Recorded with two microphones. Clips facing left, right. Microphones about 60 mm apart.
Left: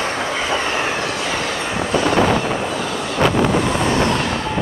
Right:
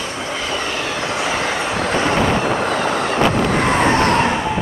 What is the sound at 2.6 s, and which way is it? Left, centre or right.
Vehicle, right.